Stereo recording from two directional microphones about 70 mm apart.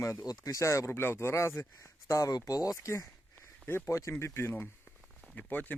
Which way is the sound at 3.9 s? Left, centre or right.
Left.